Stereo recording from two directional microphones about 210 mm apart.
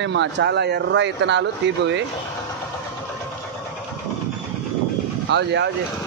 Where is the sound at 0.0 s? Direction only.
55° right (ahead or behind).